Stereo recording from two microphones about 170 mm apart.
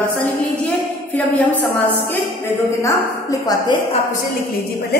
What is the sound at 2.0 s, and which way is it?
A woman's voice, 10° left (ahead or behind).